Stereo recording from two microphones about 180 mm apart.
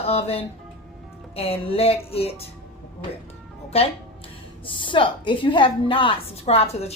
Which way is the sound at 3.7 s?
35° left (ahead or behind).